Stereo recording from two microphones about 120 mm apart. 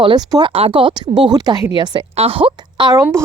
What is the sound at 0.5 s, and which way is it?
Speech, 50° right (ahead or behind).